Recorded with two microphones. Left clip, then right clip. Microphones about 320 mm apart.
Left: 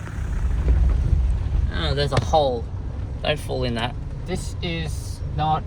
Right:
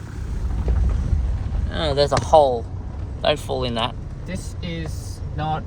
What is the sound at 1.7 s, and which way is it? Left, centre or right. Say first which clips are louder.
Speech: right 4 dB; centre.